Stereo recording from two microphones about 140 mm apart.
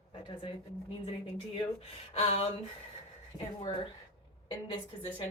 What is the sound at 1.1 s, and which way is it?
Speech, 45° left (ahead or behind).